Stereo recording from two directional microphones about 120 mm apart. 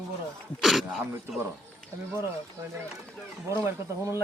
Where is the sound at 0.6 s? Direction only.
Centre (ahead or behind).